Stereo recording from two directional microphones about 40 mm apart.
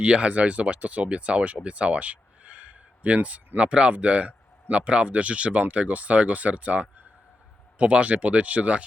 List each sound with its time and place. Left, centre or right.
0.0 s speech: right